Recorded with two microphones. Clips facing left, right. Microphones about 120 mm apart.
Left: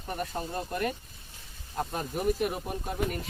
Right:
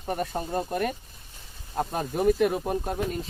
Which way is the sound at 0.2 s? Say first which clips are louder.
Right 2 dB; 45° right (ahead or behind).